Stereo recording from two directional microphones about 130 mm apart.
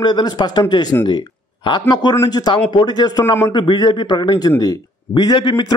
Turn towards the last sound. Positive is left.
turn(degrees=35)  # may be behind; listen again after turning